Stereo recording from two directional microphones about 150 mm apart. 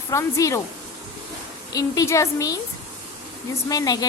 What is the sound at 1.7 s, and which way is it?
Speech, 20° left (ahead or behind).